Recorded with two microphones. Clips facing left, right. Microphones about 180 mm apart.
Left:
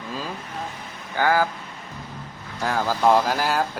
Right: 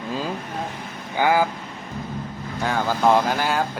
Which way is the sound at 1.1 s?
15° right (ahead or behind).